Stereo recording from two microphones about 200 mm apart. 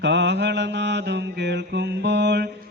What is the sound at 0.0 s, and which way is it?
Mantra, 60° right (ahead or behind).